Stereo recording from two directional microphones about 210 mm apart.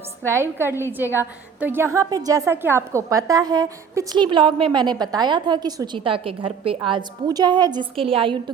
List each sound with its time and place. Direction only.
0.3 s a woman's voice: 10° right (ahead or behind)